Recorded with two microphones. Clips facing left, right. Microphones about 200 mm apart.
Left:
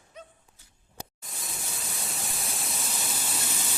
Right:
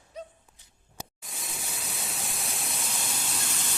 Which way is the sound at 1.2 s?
Centre (ahead or behind).